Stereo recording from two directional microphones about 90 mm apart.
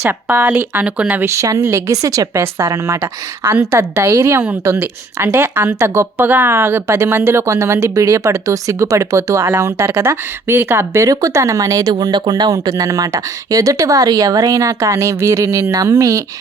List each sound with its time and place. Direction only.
0.0 s speech: 25° right (ahead or behind)
1.4 s speech: 35° right (ahead or behind)
3.0 s speech: 20° right (ahead or behind); by 16.2 s 35° right (ahead or behind)